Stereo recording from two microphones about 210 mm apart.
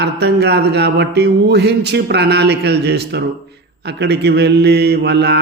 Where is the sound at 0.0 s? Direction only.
50° right (ahead or behind).